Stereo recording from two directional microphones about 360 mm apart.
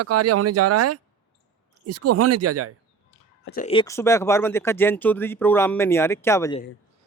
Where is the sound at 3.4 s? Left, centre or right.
Left; by 6.6 s centre.